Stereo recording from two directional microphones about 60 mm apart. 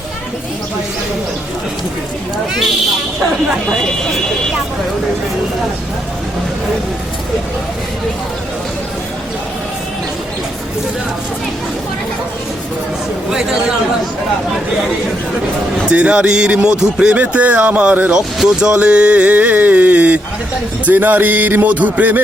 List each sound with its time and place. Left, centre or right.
15.9 s speech: centre
18.4 s speech: centre